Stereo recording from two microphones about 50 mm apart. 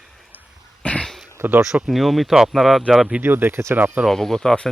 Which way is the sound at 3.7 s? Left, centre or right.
Right.